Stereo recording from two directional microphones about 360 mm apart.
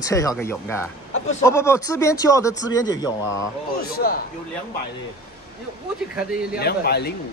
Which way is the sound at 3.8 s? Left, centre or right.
Left.